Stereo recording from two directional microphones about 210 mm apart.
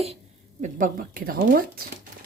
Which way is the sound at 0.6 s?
40° right (ahead or behind).